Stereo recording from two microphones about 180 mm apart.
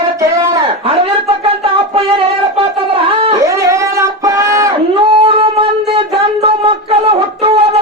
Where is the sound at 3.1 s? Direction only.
30° right (ahead or behind).